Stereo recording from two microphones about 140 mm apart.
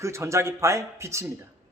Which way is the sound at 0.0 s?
20° right (ahead or behind).